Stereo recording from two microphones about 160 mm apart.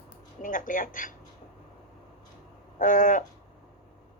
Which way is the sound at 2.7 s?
55° left (ahead or behind).